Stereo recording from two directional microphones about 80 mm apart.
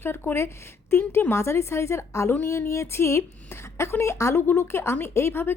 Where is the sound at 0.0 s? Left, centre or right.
Left.